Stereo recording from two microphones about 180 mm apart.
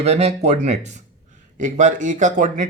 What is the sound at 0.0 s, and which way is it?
Speech, 35° right (ahead or behind).